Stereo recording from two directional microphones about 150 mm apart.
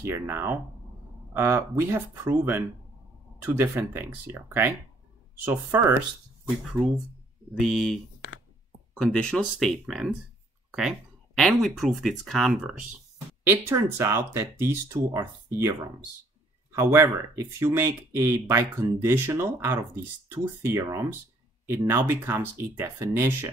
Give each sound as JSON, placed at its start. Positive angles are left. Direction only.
{"t": 0.0, "sound": "speech", "side_deg": -15}
{"t": 7.5, "sound": "speech", "side_deg": 0}
{"t": 13.4, "sound": "speech", "side_deg": -15}